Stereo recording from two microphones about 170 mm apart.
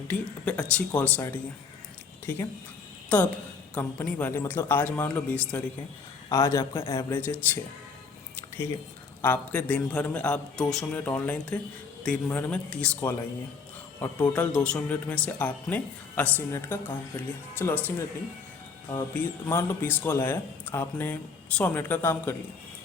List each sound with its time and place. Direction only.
0.1 s speech: 5° left (ahead or behind)
8.4 s a sound: 15° left (ahead or behind)
9.2 s speech: 10° left (ahead or behind)
14.3 s speech: 5° left (ahead or behind)